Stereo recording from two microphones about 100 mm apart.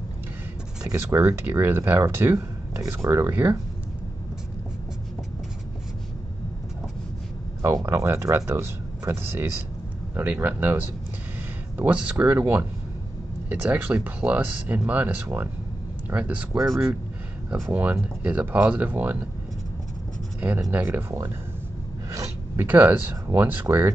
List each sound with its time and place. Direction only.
0.9 s speech: 25° right (ahead or behind)
7.6 s speech: 30° right (ahead or behind)
16.5 s speech: 30° right (ahead or behind)
17.7 s speech: 15° right (ahead or behind)
20.3 s writing: 20° right (ahead or behind)
20.7 s speech: 20° right (ahead or behind)
22.6 s speech: 20° right (ahead or behind)